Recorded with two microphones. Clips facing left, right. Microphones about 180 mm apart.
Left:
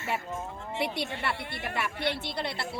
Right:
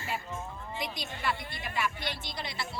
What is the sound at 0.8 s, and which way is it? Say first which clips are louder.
A woman's voice: left 7 dB; 65° left (ahead or behind).